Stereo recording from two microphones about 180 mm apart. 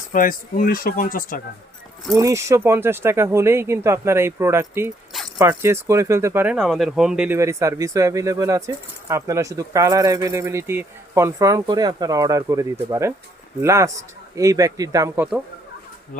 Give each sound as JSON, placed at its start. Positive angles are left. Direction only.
{"t": 0.1, "sound": "speech", "side_deg": 50}
{"t": 2.1, "sound": "speech", "side_deg": -15}
{"t": 7.3, "sound": "speech", "side_deg": -15}